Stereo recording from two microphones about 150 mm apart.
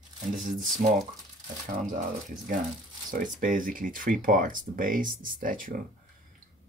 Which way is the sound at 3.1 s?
65° right (ahead or behind).